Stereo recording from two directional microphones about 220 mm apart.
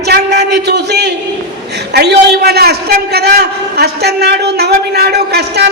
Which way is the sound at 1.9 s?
50° right (ahead or behind).